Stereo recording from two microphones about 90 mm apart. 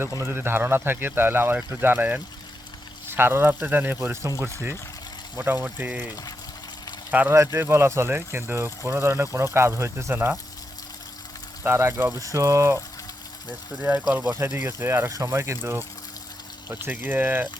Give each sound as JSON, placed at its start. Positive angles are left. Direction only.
{"t": 0.2, "sound": "speech", "side_deg": -25}
{"t": 7.3, "sound": "speech", "side_deg": -30}
{"t": 11.6, "sound": "speech", "side_deg": -30}
{"t": 13.7, "sound": "speech", "side_deg": -20}
{"t": 15.1, "sound": "speech", "side_deg": -40}
{"t": 15.4, "sound": "speech", "side_deg": -30}